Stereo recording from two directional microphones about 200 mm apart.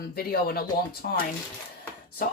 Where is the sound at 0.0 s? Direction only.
50° left (ahead or behind).